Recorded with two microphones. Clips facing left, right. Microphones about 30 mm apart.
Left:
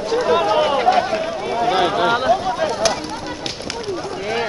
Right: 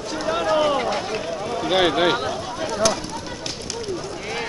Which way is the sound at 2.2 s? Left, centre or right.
Left.